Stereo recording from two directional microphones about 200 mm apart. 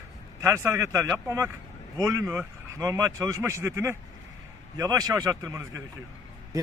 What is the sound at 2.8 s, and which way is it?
A man's voice, 15° right (ahead or behind).